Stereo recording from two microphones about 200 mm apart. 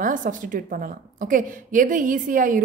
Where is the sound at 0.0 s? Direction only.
40° right (ahead or behind).